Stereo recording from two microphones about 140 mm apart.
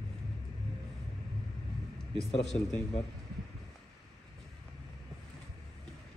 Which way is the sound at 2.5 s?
90° left.